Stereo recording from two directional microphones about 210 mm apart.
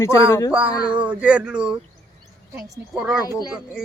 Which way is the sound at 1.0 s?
5° right (ahead or behind).